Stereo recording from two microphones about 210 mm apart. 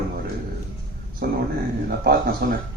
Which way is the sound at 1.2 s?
50° right (ahead or behind).